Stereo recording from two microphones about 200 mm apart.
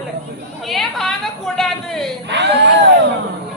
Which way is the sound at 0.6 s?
Centre (ahead or behind).